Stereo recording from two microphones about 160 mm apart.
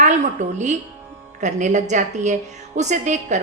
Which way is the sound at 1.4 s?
50° right (ahead or behind).